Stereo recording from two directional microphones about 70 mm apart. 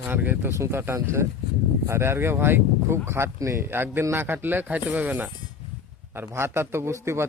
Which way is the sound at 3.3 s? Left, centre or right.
Right.